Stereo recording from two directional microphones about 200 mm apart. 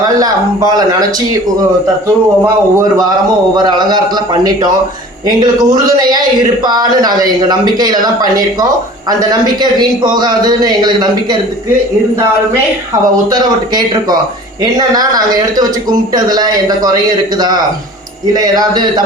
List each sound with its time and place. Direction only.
0.2 s a man's voice: 20° right (ahead or behind)
2.4 s a man's voice: 15° right (ahead or behind)
13.3 s a man's voice: 20° right (ahead or behind)